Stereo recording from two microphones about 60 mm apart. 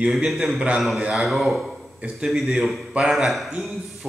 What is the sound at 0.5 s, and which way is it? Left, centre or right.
Speech, centre.